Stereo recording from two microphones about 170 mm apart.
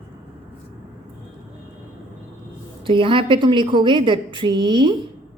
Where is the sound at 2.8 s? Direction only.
30° right (ahead or behind).